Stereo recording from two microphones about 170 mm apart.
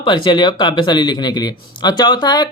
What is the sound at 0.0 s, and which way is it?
Speech, 25° left (ahead or behind).